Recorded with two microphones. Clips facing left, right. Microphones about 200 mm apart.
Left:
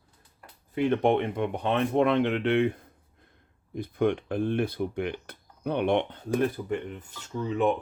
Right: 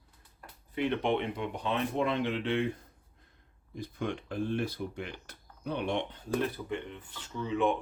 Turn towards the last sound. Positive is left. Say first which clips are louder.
# left 3 dB
turn(degrees=40)  # may be behind; listen again after turning